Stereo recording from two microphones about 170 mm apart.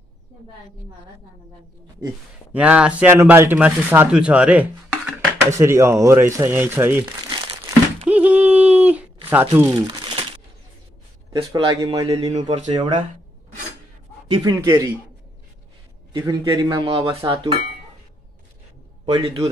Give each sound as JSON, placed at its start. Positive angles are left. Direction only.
{"t": 2.5, "sound": "speech", "side_deg": -5}
{"t": 7.2, "sound": "crumpling", "side_deg": -30}
{"t": 8.1, "sound": "a sound", "side_deg": -10}
{"t": 9.6, "sound": "speech", "side_deg": -20}
{"t": 11.5, "sound": "speech", "side_deg": -30}
{"t": 12.7, "sound": "a man's voice", "side_deg": -25}
{"t": 14.2, "sound": "a man's voice", "side_deg": -25}
{"t": 16.1, "sound": "a man's voice", "side_deg": -25}
{"t": 19.1, "sound": "a man's voice", "side_deg": -30}